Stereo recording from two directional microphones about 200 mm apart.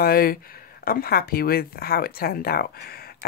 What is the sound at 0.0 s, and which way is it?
Speech, 50° left (ahead or behind).